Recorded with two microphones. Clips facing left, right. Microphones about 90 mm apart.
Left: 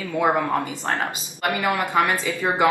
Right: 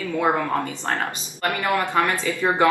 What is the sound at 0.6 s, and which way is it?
Speech, 15° left (ahead or behind).